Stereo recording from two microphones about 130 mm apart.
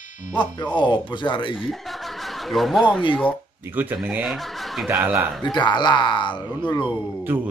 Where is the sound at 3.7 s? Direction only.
15° right (ahead or behind).